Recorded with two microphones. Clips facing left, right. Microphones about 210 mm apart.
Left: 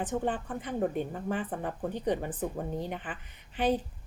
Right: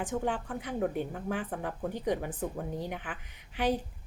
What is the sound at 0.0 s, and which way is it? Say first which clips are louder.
A woman's voice: left 1 dB; 10° right (ahead or behind).